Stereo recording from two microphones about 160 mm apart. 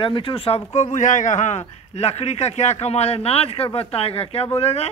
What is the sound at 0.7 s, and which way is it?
Speech, 45° left (ahead or behind).